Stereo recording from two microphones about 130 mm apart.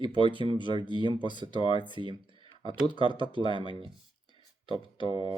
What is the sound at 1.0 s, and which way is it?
Speech, 35° left (ahead or behind).